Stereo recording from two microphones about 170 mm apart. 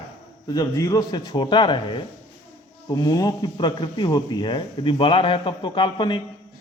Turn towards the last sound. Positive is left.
turn(degrees=25)  # may be behind; listen again after turning